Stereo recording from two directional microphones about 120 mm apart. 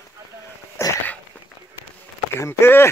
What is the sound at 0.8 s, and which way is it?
Dog, 20° left (ahead or behind).